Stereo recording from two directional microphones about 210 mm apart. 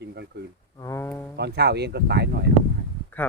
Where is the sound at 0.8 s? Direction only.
15° left (ahead or behind).